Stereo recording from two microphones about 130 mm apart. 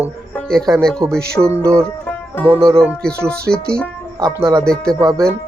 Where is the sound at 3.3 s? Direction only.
5° left (ahead or behind).